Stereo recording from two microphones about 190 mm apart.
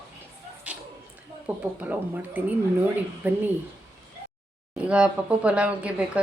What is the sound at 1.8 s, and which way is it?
A woman's voice, 10° right (ahead or behind).